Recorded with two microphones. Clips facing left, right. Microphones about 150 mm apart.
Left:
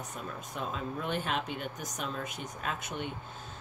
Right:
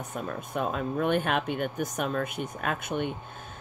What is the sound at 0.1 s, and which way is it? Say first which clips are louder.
Speech: right 7 dB; 55° right (ahead or behind).